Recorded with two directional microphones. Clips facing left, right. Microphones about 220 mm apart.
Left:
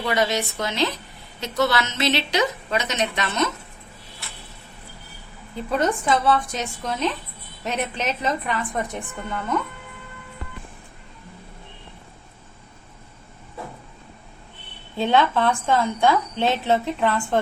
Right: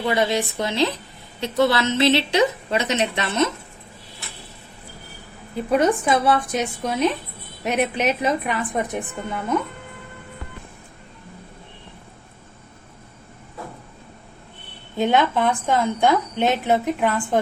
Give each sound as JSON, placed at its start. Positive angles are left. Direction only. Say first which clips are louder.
{"t": 0.0, "sound": "a woman's voice", "louder": "right 2 dB", "side_deg": -25}
{"t": 5.7, "sound": "a woman's voice", "louder": "right 3 dB", "side_deg": -15}
{"t": 14.9, "sound": "a woman's voice", "louder": "right 1 dB", "side_deg": -15}